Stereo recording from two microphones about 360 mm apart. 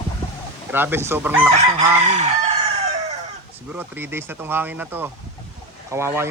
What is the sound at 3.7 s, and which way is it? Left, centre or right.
Speech, centre.